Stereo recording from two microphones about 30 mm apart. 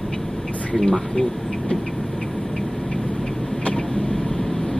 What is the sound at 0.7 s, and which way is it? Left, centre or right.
Speech, left.